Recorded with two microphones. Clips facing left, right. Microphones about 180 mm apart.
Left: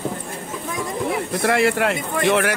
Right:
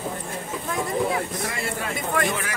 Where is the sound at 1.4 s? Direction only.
80° left.